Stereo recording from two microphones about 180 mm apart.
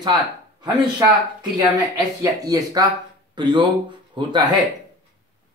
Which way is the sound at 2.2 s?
20° right (ahead or behind).